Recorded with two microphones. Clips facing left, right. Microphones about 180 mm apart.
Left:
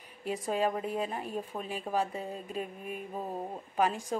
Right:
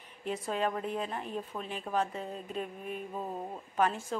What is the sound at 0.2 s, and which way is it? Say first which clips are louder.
A woman's voice: left 2 dB; 10° left (ahead or behind).